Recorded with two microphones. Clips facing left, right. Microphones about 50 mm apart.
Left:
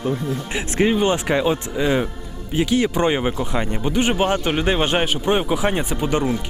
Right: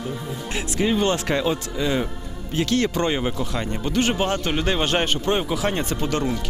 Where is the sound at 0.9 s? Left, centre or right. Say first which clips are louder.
Left 3 dB; centre.